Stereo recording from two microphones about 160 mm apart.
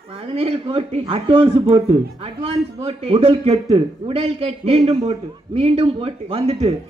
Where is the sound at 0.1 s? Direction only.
35° right (ahead or behind).